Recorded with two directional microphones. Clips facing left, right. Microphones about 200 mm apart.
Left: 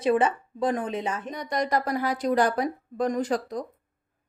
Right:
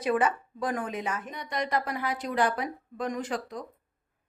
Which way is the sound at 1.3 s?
40° left (ahead or behind).